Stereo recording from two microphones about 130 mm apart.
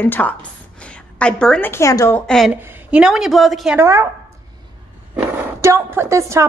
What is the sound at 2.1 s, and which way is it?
Speech, 5° left (ahead or behind).